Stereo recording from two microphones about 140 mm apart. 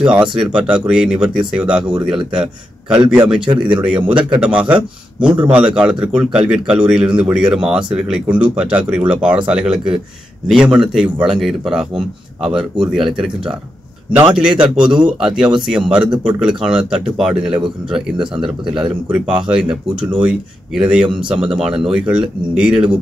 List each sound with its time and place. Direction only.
0.0 s a man's voice: 5° right (ahead or behind)
18.1 s speech: 35° right (ahead or behind)
18.4 s a man's voice: 5° right (ahead or behind)